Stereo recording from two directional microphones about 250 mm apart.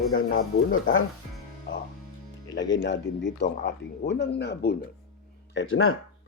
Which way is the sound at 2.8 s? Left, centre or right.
Left.